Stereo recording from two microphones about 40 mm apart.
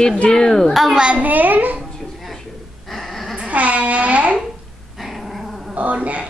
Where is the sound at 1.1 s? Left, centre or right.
Right.